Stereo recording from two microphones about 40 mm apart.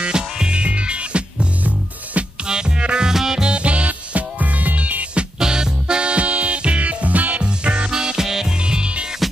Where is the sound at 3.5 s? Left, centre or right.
Right.